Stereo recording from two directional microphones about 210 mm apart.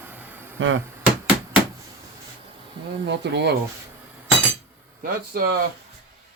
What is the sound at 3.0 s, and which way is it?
Speech, 55° right (ahead or behind).